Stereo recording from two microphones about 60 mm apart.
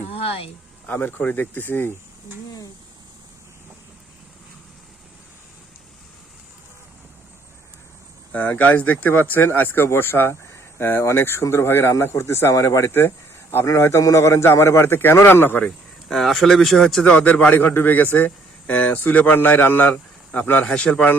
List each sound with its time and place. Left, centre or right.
0.9 s speech: left
8.3 s a man's voice: left
12.5 s speech: left
12.8 s speech: left
13.7 s a man's voice: left
15.6 s speech: centre
17.1 s a man's voice: centre; by 19.9 s left
19.9 s a man's voice: left